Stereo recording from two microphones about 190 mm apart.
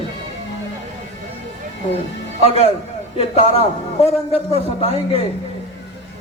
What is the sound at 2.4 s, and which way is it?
A woman's voice, 30° left (ahead or behind).